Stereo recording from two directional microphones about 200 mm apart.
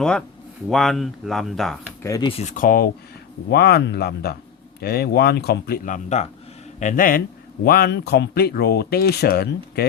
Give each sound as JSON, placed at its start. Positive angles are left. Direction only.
{"t": 0.0, "sound": "speech", "side_deg": 5}
{"t": 2.0, "sound": "speech", "side_deg": 15}
{"t": 2.3, "sound": "speech", "side_deg": 40}